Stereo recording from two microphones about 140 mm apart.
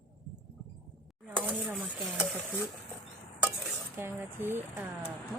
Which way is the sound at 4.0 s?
15° right (ahead or behind).